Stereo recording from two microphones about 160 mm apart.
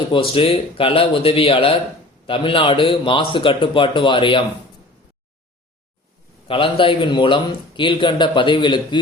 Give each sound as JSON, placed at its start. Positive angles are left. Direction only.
{"t": 0.1, "sound": "speech", "side_deg": 35}
{"t": 6.5, "sound": "speech", "side_deg": 35}